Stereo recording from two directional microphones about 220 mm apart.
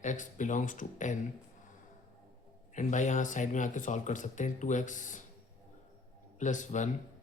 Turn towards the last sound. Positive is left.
turn(degrees=35)  # may be behind; listen again after turning